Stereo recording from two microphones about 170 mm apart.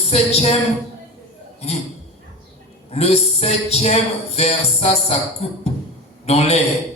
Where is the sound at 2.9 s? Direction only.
40° left (ahead or behind).